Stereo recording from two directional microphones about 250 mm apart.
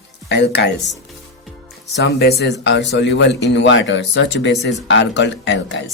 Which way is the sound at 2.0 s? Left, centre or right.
Left.